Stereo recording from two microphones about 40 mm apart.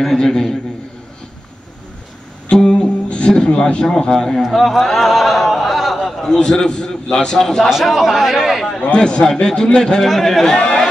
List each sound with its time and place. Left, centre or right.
0.0 s a man's voice: centre
2.5 s music: left
4.1 s a man's voice: centre
4.4 s a sound: centre
6.6 s a man's voice: centre
7.8 s speech: centre
8.8 s a man's voice: left
10.0 s speech: centre